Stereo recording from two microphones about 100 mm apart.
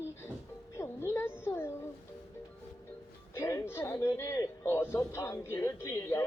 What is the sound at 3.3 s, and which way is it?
A woman's voice, 30° left (ahead or behind).